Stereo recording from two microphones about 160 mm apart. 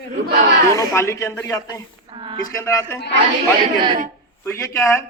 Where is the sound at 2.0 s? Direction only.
30° right (ahead or behind).